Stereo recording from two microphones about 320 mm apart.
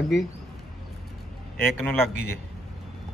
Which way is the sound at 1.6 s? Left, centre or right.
Centre.